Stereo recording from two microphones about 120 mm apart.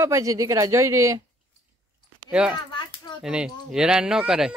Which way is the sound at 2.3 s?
10° right (ahead or behind).